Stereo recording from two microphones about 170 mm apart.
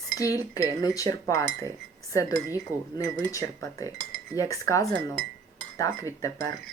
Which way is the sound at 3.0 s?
20° left (ahead or behind).